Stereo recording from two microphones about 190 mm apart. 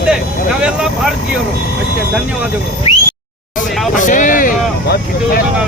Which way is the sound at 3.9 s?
45° left (ahead or behind).